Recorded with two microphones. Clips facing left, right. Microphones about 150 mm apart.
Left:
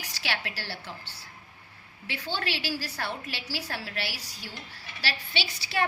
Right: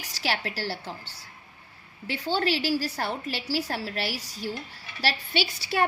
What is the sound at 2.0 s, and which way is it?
A woman's voice, 35° right (ahead or behind).